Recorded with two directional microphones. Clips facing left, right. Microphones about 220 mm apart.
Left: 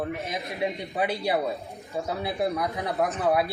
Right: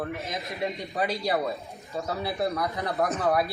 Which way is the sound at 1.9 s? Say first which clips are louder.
Left 1 dB; 15° left (ahead or behind).